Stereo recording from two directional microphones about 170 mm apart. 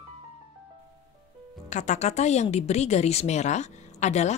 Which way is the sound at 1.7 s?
40° left (ahead or behind).